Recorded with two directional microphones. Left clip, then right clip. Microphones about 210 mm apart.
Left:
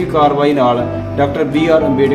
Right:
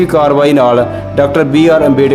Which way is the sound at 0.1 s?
55° right (ahead or behind).